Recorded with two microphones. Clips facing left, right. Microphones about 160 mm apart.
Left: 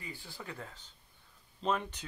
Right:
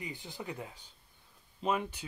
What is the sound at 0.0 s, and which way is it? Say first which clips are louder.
Speech: right 4 dB; 20° right (ahead or behind).